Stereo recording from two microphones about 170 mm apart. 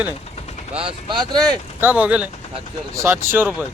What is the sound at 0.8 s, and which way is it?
Speech, 30° right (ahead or behind).